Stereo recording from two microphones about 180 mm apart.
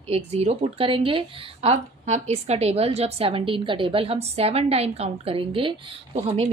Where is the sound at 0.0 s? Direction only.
35° right (ahead or behind).